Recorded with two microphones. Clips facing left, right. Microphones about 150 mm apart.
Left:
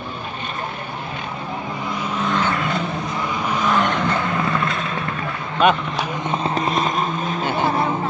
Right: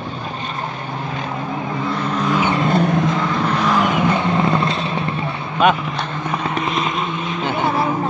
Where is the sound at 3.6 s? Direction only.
5° right (ahead or behind).